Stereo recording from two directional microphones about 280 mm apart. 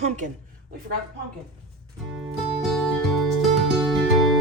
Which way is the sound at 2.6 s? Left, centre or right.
Centre.